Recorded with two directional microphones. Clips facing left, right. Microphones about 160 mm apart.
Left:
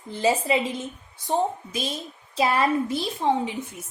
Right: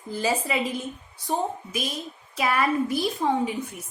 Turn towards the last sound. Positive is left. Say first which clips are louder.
# left 1 dB
turn(degrees=25)  # may be behind; listen again after turning